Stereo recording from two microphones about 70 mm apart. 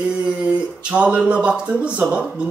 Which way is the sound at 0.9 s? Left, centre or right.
Centre.